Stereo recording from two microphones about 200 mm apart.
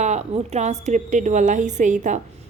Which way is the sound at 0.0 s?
35° right (ahead or behind).